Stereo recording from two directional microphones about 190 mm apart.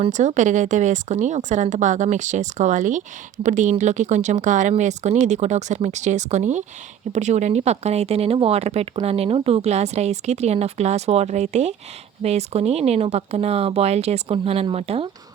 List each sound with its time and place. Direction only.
0.0 s speech: 40° right (ahead or behind)